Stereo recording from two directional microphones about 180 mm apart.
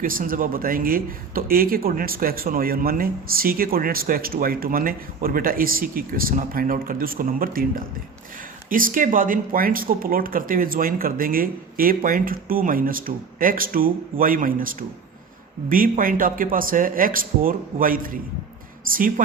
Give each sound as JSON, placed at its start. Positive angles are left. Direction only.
{"t": 0.0, "sound": "speech", "side_deg": -50}